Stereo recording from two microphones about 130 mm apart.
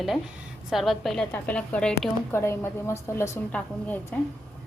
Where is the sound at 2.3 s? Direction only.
20° left (ahead or behind).